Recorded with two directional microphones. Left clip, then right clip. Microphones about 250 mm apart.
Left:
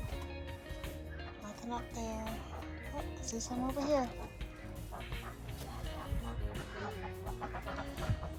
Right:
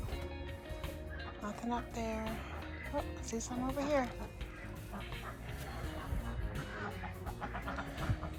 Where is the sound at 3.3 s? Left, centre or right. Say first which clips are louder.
Left 1 dB; centre.